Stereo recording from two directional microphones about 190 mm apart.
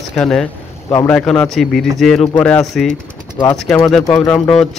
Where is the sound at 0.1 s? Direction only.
Centre (ahead or behind).